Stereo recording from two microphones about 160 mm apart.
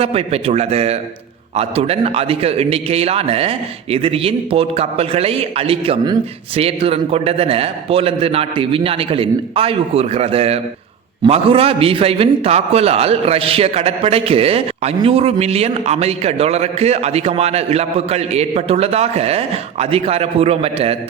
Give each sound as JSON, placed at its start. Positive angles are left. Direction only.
{"t": 0.0, "sound": "a man's voice", "side_deg": -40}